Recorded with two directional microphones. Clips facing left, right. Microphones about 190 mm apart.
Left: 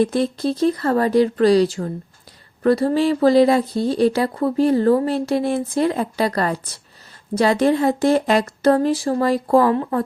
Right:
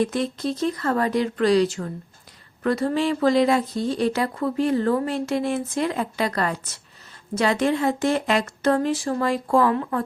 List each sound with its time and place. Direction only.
0.0 s speech: 35° left (ahead or behind)